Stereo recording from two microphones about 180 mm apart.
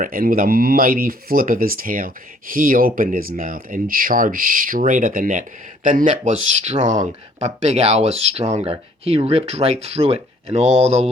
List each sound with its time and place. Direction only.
0.0 s speech: 50° right (ahead or behind); by 11.1 s 35° right (ahead or behind)